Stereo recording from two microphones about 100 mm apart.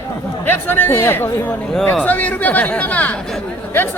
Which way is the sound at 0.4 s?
20° left (ahead or behind).